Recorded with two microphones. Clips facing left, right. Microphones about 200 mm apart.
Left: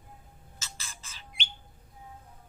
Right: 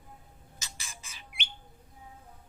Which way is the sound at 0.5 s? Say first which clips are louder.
Left 1 dB; 15° right (ahead or behind).